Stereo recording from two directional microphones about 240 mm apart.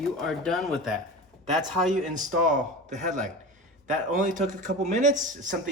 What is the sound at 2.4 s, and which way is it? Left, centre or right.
A man's voice, right.